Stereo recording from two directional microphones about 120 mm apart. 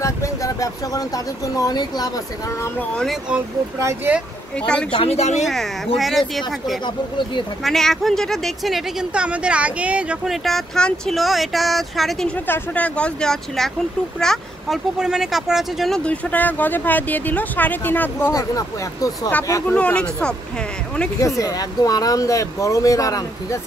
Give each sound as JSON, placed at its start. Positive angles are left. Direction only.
{"t": 0.0, "sound": "speech", "side_deg": 25}
{"t": 4.6, "sound": "speech", "side_deg": 10}
{"t": 4.9, "sound": "speech", "side_deg": 60}
{"t": 5.4, "sound": "speech", "side_deg": 0}
{"t": 12.4, "sound": "speech", "side_deg": 15}
{"t": 18.3, "sound": "speech", "side_deg": 30}
{"t": 19.7, "sound": "speech", "side_deg": 10}
{"t": 21.4, "sound": "speech", "side_deg": 30}